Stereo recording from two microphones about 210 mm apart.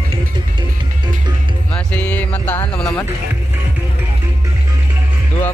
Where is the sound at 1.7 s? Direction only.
5° left (ahead or behind).